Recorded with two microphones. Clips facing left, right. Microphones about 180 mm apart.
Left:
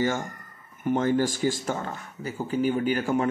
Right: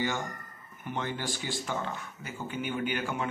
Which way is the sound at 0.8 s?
45° left (ahead or behind).